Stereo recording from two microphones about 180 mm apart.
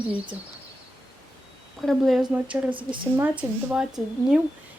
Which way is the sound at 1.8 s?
Centre (ahead or behind).